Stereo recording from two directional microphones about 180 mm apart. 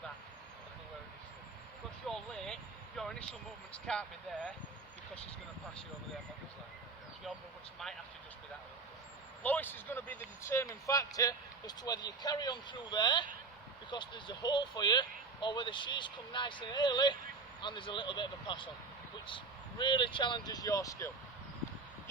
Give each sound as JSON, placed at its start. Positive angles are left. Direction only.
{"t": 2.0, "sound": "vehicle", "side_deg": 5}
{"t": 3.8, "sound": "speech", "side_deg": 5}
{"t": 9.4, "sound": "speech", "side_deg": 10}
{"t": 19.8, "sound": "speech", "side_deg": 25}